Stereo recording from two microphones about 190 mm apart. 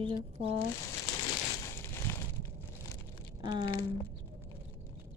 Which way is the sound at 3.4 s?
25° right (ahead or behind).